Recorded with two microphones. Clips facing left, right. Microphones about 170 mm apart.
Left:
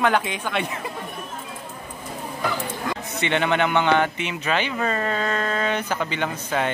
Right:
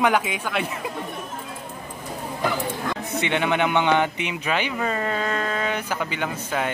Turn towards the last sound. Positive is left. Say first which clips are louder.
# left 1 dB
turn(degrees=-5)  # may be behind; listen again after turning